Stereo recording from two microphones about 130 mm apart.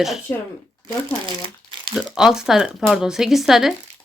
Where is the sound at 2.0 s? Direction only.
5° right (ahead or behind).